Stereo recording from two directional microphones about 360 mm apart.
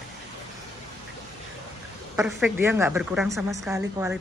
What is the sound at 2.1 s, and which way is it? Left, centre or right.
A woman's voice, centre.